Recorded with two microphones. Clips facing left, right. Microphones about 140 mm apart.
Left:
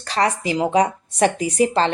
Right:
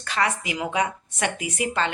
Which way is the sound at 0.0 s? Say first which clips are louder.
Left 5 dB; 35° left (ahead or behind).